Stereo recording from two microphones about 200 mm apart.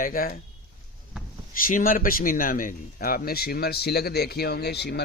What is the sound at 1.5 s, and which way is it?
A man's voice, 45° left (ahead or behind).